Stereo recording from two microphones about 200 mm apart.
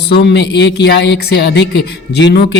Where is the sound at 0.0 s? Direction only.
55° left (ahead or behind).